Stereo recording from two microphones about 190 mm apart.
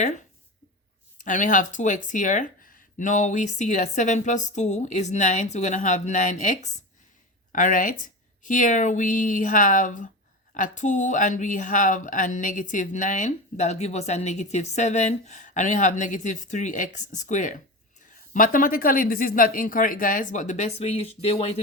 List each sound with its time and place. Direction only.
1.2 s speech: 40° left (ahead or behind)